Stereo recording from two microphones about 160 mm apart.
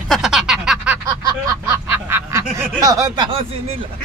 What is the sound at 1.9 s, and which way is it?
Duck, 15° right (ahead or behind).